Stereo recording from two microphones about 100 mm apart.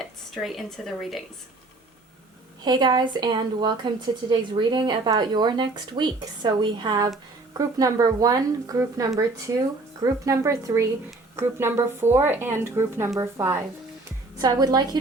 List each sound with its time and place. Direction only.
0.0 s speech: centre (ahead or behind)
2.6 s speech: 45° right (ahead or behind)
7.5 s speech: 35° right (ahead or behind)
14.3 s speech: 40° right (ahead or behind)